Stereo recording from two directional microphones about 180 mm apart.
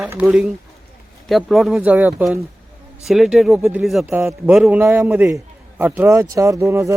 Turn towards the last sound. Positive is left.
turn(degrees=-15)  # may be behind; listen again after turning